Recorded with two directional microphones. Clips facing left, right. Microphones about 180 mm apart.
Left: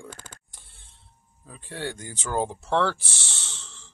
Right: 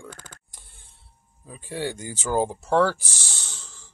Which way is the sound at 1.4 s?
10° right (ahead or behind).